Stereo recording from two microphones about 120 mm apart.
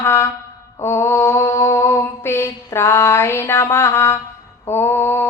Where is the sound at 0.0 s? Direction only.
20° left (ahead or behind).